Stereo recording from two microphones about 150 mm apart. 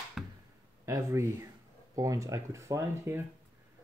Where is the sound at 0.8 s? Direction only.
20° right (ahead or behind).